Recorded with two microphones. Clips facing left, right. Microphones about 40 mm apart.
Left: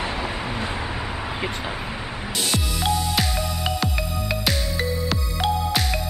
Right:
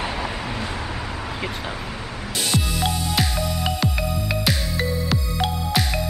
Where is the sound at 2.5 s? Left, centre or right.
Centre.